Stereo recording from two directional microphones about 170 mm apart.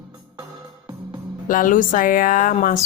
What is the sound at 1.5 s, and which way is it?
A woman's voice, 50° left (ahead or behind).